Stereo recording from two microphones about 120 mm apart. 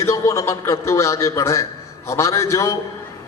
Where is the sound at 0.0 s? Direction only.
25° left (ahead or behind).